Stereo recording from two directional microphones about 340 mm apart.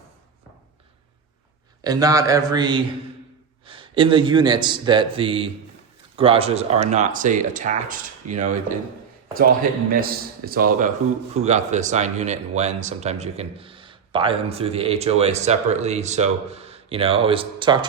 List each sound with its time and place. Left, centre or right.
1.8 s a man's voice: centre
9.9 s speech: right